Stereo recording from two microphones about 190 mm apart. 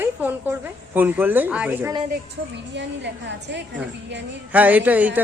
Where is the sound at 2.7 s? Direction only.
70° right (ahead or behind).